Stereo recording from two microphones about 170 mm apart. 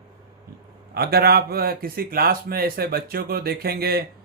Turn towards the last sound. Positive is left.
turn(degrees=-65)  # may be behind; listen again after turning